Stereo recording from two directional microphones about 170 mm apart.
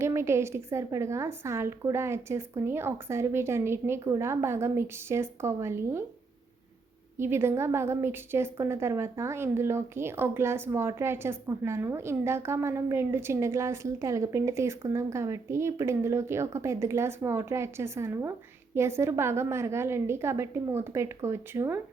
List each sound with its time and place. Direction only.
0.0 s a woman's voice: 15° right (ahead or behind)
7.2 s a woman's voice: 15° right (ahead or behind)